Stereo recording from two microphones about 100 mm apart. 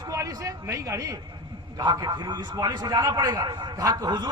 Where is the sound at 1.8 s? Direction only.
45° right (ahead or behind).